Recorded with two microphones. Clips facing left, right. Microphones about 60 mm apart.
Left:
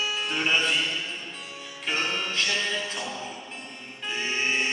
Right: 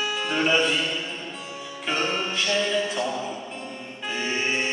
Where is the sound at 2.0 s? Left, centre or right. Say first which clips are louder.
Right 3 dB; right.